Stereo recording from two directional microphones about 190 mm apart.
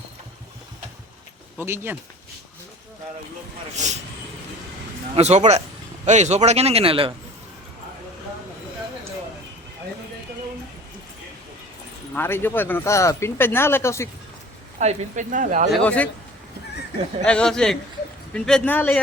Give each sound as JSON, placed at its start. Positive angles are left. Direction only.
{"t": 1.5, "sound": "speech", "side_deg": -10}
{"t": 3.8, "sound": "a man's voice", "side_deg": -40}
{"t": 5.1, "sound": "a man's voice", "side_deg": -35}
{"t": 12.1, "sound": "speech", "side_deg": 10}
{"t": 14.8, "sound": "a man's voice", "side_deg": -40}
{"t": 15.7, "sound": "speech", "side_deg": 5}
{"t": 17.2, "sound": "a man's voice", "side_deg": 5}